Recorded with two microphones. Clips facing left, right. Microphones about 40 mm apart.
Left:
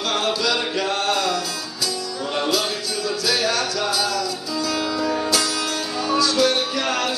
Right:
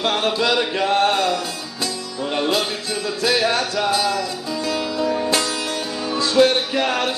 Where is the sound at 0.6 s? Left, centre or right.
Right.